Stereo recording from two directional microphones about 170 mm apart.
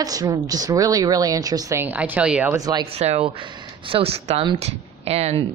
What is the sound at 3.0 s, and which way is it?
A woman's voice, 40° right (ahead or behind).